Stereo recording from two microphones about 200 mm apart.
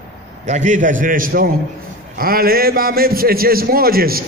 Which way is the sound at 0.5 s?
40° right (ahead or behind).